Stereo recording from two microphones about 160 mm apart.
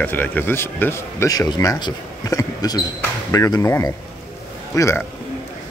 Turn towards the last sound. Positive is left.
turn(degrees=20)  # may be behind; listen again after turning